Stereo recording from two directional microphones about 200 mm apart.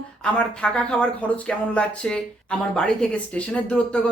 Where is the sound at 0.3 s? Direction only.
5° left (ahead or behind).